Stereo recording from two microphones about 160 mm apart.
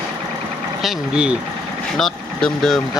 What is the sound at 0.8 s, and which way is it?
Speech, 5° right (ahead or behind).